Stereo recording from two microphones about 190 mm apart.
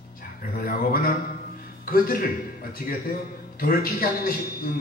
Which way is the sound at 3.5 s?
50° left (ahead or behind).